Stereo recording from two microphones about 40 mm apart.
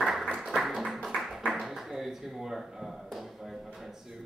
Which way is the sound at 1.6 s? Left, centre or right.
Centre.